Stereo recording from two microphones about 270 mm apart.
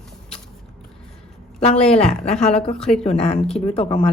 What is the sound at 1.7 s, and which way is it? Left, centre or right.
Speech, centre.